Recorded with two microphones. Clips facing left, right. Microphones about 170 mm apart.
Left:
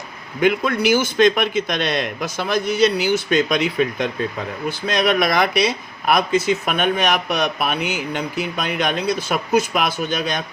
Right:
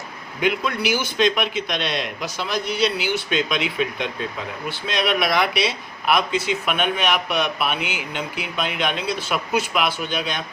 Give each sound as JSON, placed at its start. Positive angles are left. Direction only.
{"t": 0.4, "sound": "speech", "side_deg": 50}